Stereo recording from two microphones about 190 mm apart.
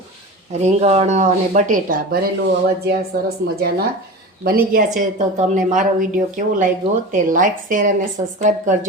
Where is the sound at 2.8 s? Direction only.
55° right (ahead or behind).